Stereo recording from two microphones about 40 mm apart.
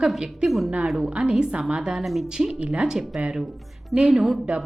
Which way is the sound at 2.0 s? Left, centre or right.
Centre.